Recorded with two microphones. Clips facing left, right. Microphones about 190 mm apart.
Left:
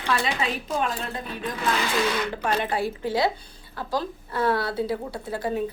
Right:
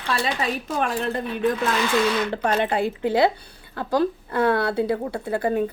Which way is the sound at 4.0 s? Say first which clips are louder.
Right 7 dB; 55° right (ahead or behind).